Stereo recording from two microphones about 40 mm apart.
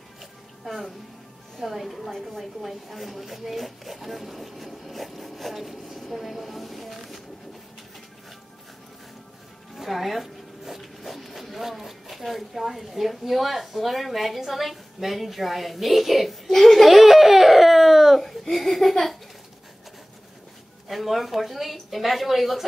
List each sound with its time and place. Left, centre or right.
0.2 s music: centre
1.6 s a woman's voice: centre
9.8 s speech: centre
16.4 s crying: centre
20.9 s a woman's voice: centre